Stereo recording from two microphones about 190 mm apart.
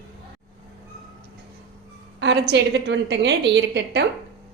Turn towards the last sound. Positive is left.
turn(degrees=-65)  # may be behind; listen again after turning